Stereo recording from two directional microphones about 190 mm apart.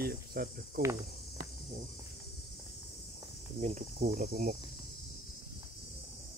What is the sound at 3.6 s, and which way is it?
Cricket, 40° right (ahead or behind).